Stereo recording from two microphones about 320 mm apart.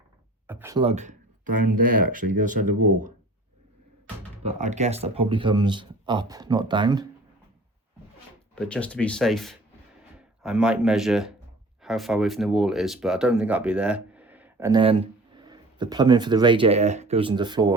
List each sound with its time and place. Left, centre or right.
0.4 s speech: centre
1.5 s speech: right
2.0 s speech: right
4.4 s speech: right
8.5 s speech: centre